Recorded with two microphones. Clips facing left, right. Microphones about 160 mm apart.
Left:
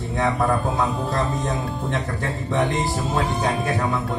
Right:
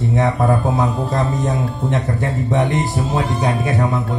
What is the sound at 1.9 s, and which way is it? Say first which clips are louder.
Speech: right 7 dB; 20° right (ahead or behind).